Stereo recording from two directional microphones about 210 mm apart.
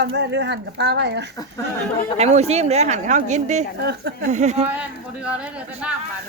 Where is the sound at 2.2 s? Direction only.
30° right (ahead or behind).